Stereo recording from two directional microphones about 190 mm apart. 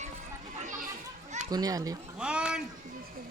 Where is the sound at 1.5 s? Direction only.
20° right (ahead or behind).